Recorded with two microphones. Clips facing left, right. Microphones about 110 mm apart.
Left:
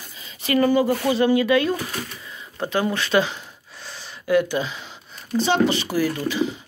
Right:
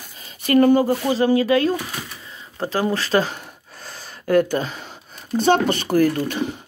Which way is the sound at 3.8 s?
45° right (ahead or behind).